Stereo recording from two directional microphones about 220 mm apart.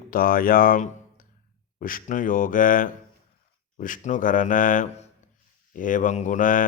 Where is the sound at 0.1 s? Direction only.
40° left (ahead or behind).